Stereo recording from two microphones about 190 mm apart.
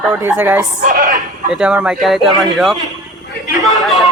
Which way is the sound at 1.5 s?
5° right (ahead or behind).